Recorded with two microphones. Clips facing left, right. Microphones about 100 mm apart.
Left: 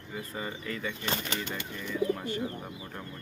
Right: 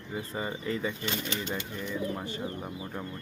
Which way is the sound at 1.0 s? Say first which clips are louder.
Even; 40° left (ahead or behind).